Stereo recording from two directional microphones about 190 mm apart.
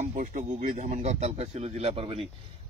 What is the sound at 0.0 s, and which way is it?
Speech, 40° right (ahead or behind).